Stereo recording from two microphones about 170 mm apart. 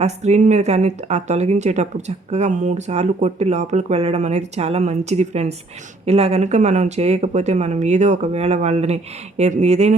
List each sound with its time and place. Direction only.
0.0 s speech: 40° right (ahead or behind)